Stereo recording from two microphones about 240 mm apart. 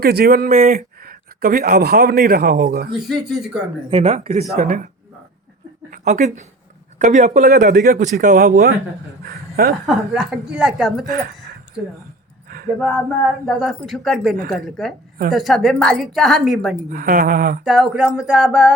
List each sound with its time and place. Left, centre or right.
0.0 s speech: right
3.0 s a woman's voice: centre
3.8 s speech: right
5.9 s speech: right
9.8 s a woman's voice: centre
11.0 s speech: right
12.5 s a sound: right
13.4 s a woman's voice: centre
16.9 s speech: right
17.6 s a woman's voice: centre